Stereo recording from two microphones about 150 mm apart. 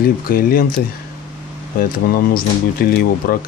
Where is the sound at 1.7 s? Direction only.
75° left (ahead or behind).